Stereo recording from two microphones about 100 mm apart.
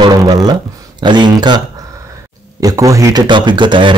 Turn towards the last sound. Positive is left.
turn(degrees=-50)  # may be behind; listen again after turning